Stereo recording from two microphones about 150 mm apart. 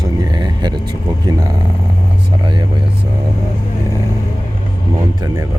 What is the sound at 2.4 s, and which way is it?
Vehicle, 30° right (ahead or behind).